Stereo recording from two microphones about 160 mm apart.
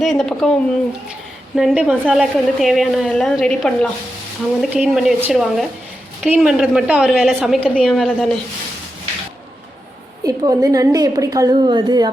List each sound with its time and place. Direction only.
0.0 s a woman's voice: centre (ahead or behind)
1.5 s a woman's voice: 5° right (ahead or behind)
10.2 s a woman's voice: 25° right (ahead or behind)